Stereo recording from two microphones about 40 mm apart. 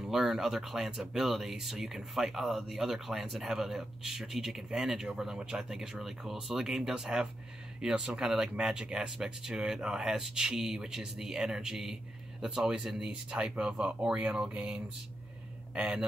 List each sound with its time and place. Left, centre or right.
0.0 s speech: centre
12.4 s speech: right